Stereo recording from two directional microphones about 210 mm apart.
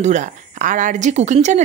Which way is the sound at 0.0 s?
35° right (ahead or behind).